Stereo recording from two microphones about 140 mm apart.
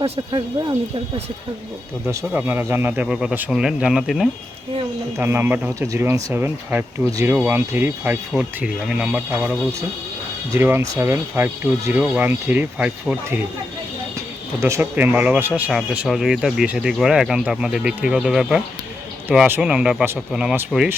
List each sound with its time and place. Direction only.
0.3 s speech: 35° right (ahead or behind)
2.0 s speech: 15° right (ahead or behind)
5.1 s speech: 15° right (ahead or behind)
10.6 s speech: 15° right (ahead or behind)
14.6 s speech: 15° right (ahead or behind)